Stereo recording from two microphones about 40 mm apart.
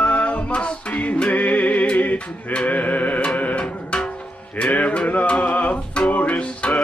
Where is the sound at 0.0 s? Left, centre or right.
Left.